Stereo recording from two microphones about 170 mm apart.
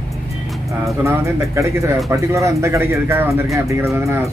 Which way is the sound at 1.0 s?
15° right (ahead or behind).